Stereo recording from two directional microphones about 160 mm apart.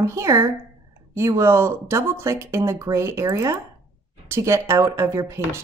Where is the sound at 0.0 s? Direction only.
20° right (ahead or behind).